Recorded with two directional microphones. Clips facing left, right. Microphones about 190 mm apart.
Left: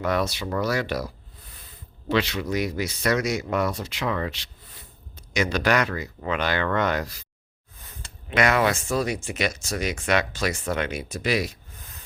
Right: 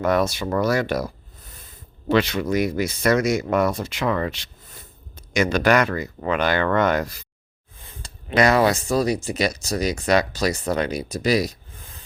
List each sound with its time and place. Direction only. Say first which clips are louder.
0.0 s speech: right 5 dB; 50° right (ahead or behind)
2.0 s speech: right 5 dB; 50° right (ahead or behind)
8.0 s speech: right 4 dB; 35° right (ahead or behind)